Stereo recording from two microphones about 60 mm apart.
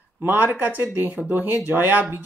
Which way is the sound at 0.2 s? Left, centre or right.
Right.